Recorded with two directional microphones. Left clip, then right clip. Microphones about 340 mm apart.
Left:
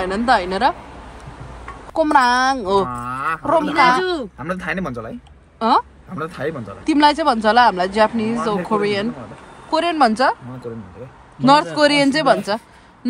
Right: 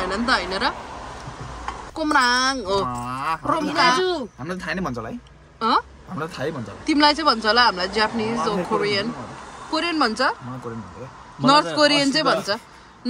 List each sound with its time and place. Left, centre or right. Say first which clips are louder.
0.0 s speech: left 5 dB; centre
2.0 s speech: left 5 dB; centre
2.9 s speech: left 3 dB; centre
3.4 s speech: left 5 dB; centre
4.5 s speech: left 4 dB; centre
5.6 s a woman's voice: left 4 dB; centre
6.1 s speech: left 3 dB; centre
6.9 s speech: left 3 dB; centre
11.4 s speech: left 3 dB; centre